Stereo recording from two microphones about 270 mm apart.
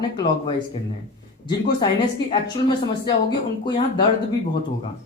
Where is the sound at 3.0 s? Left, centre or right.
Centre.